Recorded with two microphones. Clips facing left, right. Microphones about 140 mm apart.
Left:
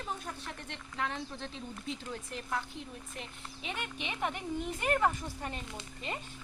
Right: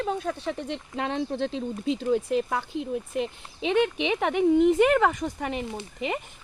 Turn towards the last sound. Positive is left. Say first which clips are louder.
# right 10 dB
turn(degrees=-70)  # may be behind; listen again after turning